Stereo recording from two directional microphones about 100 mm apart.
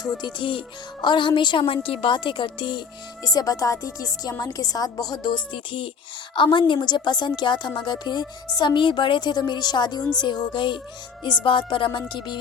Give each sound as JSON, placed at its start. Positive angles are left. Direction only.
{"t": 0.2, "sound": "a woman's voice", "side_deg": 50}
{"t": 3.2, "sound": "a woman's voice", "side_deg": 35}